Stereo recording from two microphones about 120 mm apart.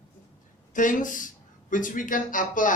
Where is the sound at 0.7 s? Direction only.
90° left.